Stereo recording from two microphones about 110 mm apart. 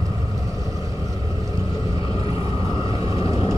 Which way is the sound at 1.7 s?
45° left (ahead or behind).